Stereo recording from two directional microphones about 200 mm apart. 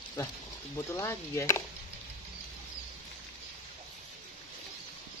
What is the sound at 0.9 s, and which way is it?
Speech, 15° left (ahead or behind).